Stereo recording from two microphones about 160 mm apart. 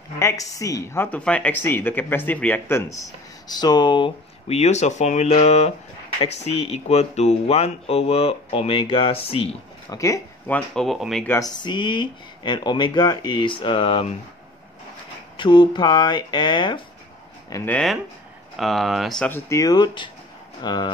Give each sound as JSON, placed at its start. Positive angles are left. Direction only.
{"t": 0.2, "sound": "a woman's voice", "side_deg": 20}
{"t": 9.9, "sound": "speech", "side_deg": 20}
{"t": 11.2, "sound": "a woman's voice", "side_deg": 20}
{"t": 15.3, "sound": "a woman's voice", "side_deg": 30}
{"t": 18.6, "sound": "a woman's voice", "side_deg": 0}